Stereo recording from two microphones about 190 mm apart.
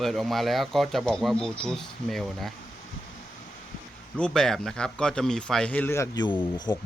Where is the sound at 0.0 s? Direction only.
Centre (ahead or behind).